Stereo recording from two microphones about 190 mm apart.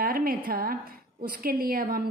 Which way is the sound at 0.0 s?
50° right (ahead or behind).